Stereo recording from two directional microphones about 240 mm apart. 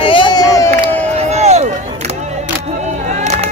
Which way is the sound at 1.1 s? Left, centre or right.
Right.